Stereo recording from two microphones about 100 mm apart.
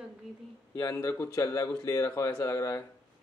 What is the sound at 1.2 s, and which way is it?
Speech, 35° left (ahead or behind).